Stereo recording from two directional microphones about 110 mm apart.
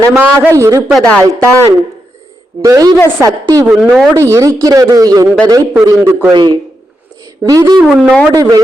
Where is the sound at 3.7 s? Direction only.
Centre (ahead or behind).